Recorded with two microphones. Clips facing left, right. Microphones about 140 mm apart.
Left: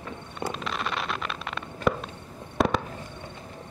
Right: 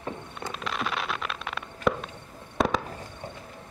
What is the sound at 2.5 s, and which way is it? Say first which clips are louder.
Fireworks: left 1 dB; centre (ahead or behind).